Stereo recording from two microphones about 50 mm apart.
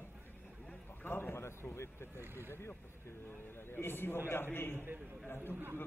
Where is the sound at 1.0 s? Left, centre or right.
Left.